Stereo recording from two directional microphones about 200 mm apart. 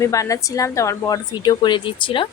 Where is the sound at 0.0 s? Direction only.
15° left (ahead or behind).